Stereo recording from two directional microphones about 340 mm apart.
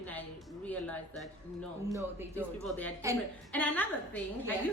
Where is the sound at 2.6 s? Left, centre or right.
Centre.